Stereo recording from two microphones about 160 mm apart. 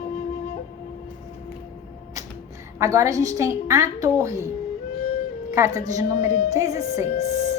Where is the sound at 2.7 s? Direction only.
20° right (ahead or behind).